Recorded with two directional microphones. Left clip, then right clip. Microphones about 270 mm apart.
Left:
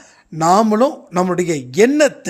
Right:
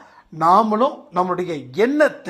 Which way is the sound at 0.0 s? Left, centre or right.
Left.